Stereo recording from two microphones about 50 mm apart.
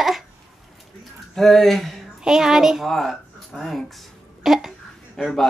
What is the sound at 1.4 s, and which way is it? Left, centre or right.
Speech, centre.